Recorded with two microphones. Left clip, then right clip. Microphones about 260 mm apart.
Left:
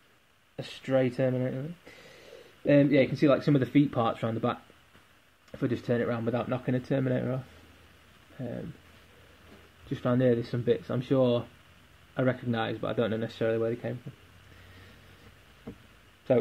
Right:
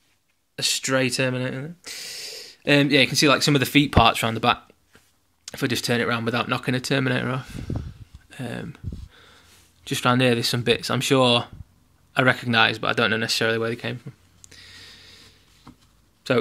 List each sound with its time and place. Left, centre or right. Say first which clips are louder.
0.6 s speech: right 6 dB; right
9.8 s speech: right 6 dB; right